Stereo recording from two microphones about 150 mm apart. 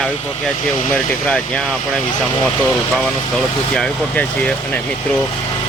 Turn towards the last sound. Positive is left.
turn(degrees=5)  # may be behind; listen again after turning